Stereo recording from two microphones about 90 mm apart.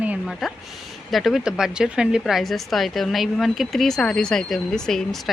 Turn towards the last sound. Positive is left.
turn(degrees=5)  # may be behind; listen again after turning